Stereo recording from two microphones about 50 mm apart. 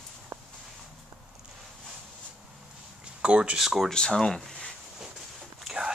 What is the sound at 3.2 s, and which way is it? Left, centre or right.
Speech, right.